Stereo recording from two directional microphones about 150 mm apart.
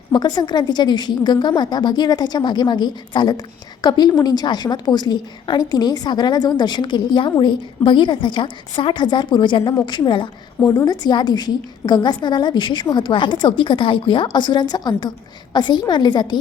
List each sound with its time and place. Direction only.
0.1 s a woman's voice: 30° left (ahead or behind)